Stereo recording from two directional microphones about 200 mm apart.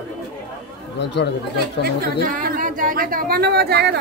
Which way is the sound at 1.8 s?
45° right (ahead or behind).